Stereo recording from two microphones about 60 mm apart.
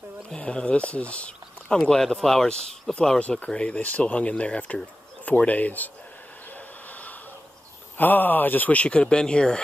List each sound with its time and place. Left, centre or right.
0.3 s speech: centre
8.0 s speech: left; by 9.6 s centre